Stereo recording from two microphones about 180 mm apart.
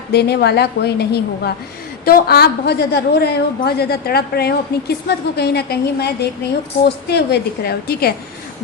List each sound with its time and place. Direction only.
0.1 s a woman's voice: 65° left (ahead or behind)